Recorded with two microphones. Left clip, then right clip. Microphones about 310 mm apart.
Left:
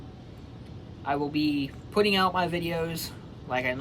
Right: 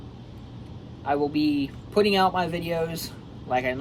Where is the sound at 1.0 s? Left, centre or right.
Centre.